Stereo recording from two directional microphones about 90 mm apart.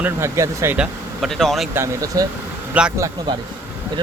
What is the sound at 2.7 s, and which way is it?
Speech, 15° right (ahead or behind).